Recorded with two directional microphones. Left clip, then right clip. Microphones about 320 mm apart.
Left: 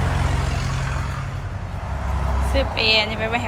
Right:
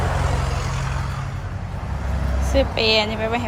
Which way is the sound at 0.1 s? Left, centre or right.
Right.